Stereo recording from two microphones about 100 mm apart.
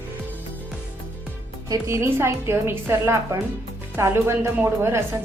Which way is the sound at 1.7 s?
30° right (ahead or behind).